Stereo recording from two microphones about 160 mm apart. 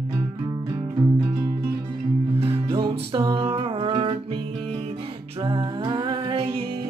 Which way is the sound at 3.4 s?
35° right (ahead or behind).